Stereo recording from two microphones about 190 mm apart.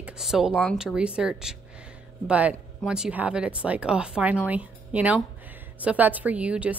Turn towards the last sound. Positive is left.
turn(degrees=-5)  # may be behind; listen again after turning